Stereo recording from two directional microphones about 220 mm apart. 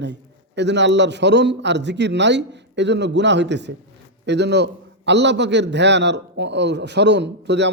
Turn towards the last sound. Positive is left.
turn(degrees=-50)  # may be behind; listen again after turning